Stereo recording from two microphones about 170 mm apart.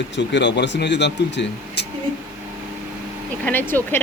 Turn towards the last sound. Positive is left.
turn(degrees=10)  # may be behind; listen again after turning